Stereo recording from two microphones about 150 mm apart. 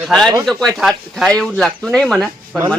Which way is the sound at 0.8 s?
Centre (ahead or behind).